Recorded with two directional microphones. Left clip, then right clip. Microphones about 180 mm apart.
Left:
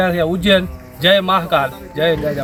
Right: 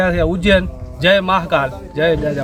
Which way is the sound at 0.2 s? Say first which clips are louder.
Even; 5° right (ahead or behind).